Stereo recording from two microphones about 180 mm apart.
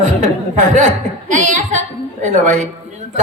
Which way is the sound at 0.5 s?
40° right (ahead or behind).